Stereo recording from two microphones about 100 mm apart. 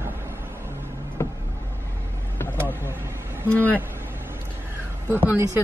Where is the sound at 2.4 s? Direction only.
20° left (ahead or behind).